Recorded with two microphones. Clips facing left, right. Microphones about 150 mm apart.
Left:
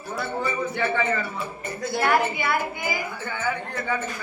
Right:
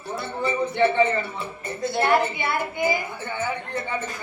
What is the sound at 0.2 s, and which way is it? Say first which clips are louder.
Speech: right 1 dB; 25° right (ahead or behind).